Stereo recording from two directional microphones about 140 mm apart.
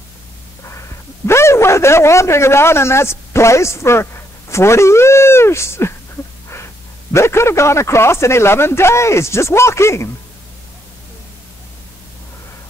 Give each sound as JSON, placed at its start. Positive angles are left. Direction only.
{"t": 0.7, "sound": "a man's voice", "side_deg": 20}